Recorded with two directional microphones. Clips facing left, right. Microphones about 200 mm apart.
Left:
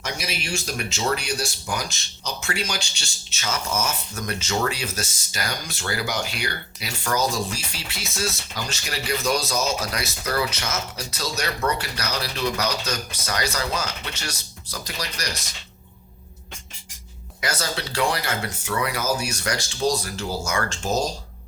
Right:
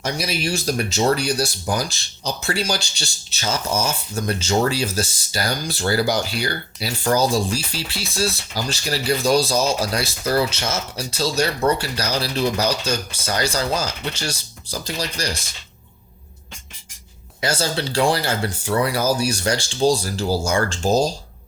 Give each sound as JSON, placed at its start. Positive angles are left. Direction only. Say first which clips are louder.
{"t": 0.0, "sound": "speech", "louder": "right 7 dB", "side_deg": -35}
{"t": 17.4, "sound": "speech", "louder": "right 5 dB", "side_deg": -30}